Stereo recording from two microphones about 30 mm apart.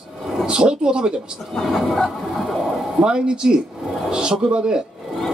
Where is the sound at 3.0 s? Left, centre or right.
Right.